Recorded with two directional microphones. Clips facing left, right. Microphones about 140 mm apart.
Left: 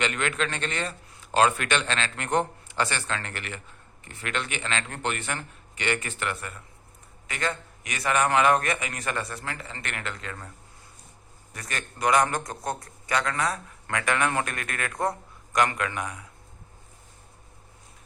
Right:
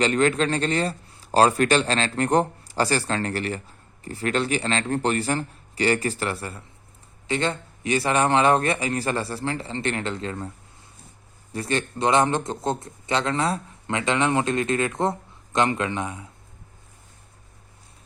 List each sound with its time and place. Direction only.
0.0 s a man's voice: 35° right (ahead or behind)
11.5 s a man's voice: 30° right (ahead or behind)